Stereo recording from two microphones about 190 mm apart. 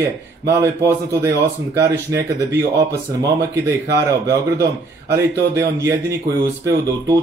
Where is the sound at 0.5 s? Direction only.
15° right (ahead or behind).